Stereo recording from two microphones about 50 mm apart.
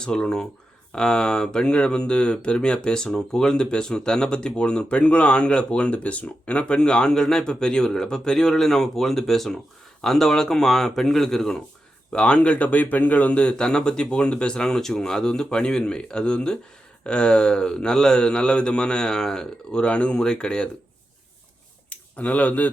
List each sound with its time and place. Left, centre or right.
0.0 s speech: centre
12.1 s speech: left
19.8 s speech: left
21.8 s speech: left